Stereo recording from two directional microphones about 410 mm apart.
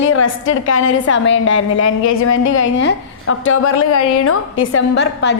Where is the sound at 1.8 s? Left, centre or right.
Left.